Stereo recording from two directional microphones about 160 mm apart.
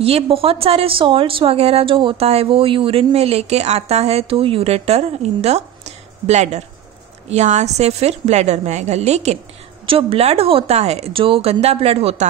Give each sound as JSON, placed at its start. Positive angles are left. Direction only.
{"t": 0.0, "sound": "a woman's voice", "side_deg": -35}